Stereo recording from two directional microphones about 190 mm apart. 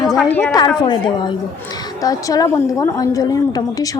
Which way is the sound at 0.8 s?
25° left (ahead or behind).